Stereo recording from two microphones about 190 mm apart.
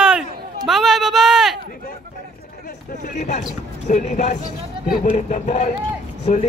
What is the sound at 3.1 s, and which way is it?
Speech, 40° left (ahead or behind).